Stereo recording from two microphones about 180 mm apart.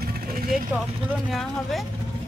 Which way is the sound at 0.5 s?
Centre (ahead or behind).